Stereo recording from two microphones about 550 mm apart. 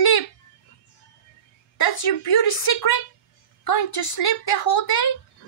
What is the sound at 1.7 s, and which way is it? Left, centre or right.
A woman's voice, left.